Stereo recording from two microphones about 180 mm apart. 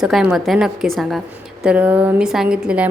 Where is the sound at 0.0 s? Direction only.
5° right (ahead or behind).